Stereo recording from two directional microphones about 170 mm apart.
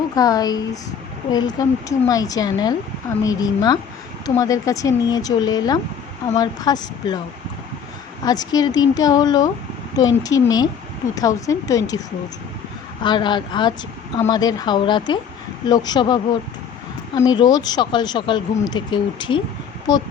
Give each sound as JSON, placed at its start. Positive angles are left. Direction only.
{"t": 0.2, "sound": "speech", "side_deg": 20}
{"t": 8.2, "sound": "speech", "side_deg": 25}